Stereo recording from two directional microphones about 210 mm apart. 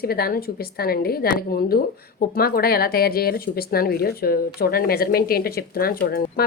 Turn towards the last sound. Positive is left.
turn(degrees=45)  # may be behind; listen again after turning